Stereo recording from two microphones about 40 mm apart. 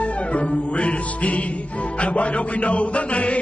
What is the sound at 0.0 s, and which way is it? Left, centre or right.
Music, left.